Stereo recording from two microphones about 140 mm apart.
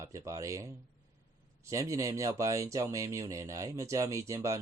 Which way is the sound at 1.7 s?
25° right (ahead or behind).